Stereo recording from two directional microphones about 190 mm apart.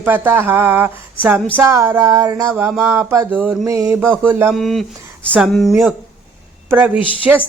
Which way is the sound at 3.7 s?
15° right (ahead or behind).